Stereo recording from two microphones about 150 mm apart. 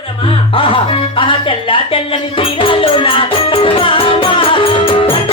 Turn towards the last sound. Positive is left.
turn(degrees=35)  # may be behind; listen again after turning